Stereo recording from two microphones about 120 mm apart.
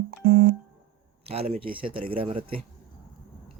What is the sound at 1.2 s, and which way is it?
Speech, 55° right (ahead or behind).